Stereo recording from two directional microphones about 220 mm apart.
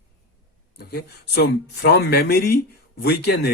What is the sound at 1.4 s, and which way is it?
Speech, 50° left (ahead or behind).